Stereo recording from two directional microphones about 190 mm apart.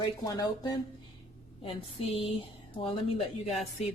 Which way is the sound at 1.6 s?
30° left (ahead or behind).